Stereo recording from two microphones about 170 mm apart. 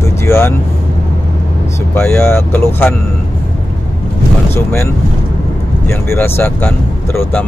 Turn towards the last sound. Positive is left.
turn(degrees=10)  # may be behind; listen again after turning